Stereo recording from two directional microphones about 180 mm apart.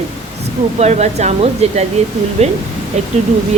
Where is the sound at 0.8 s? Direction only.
35° right (ahead or behind).